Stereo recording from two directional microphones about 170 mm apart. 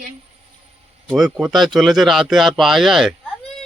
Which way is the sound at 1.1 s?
Centre (ahead or behind).